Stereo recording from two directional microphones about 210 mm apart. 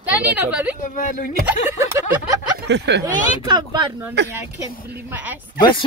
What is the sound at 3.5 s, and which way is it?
Speech, 20° right (ahead or behind).